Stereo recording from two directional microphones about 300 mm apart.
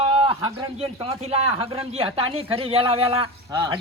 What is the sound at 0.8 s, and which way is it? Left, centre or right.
Speech, centre.